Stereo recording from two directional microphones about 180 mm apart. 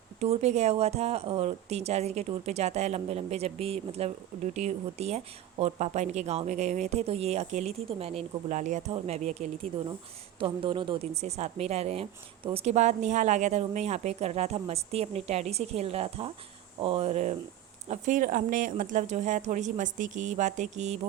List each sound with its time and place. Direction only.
0.2 s a woman's voice: 35° right (ahead or behind)